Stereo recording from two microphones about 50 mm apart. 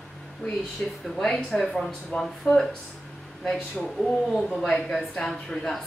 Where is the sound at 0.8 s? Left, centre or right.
Left.